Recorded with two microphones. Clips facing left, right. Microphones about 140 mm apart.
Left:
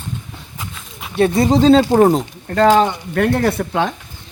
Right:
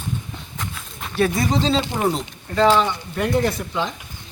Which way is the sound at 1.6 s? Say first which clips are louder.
Left 10 dB; 50° left (ahead or behind).